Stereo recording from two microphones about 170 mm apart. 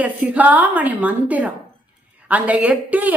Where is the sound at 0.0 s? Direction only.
10° right (ahead or behind).